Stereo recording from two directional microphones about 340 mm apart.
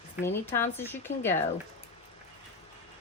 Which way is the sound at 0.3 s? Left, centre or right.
Centre.